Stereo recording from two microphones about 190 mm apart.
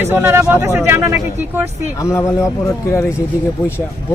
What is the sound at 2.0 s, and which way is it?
Speech, 15° left (ahead or behind).